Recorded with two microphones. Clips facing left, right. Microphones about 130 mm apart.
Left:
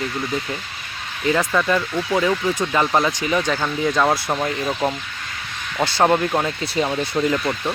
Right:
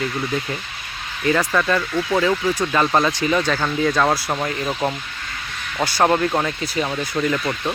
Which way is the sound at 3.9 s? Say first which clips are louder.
Even; 5° left (ahead or behind).